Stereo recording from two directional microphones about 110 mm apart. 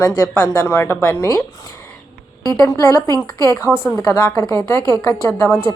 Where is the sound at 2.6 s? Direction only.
30° left (ahead or behind).